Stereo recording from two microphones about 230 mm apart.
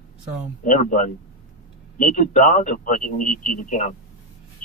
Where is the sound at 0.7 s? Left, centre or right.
Left.